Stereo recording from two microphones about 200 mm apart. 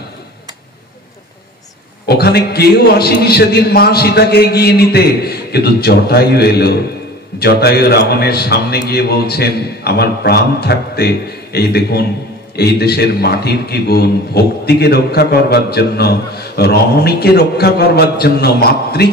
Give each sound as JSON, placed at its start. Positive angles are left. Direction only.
{"t": 2.0, "sound": "a man's voice", "side_deg": 50}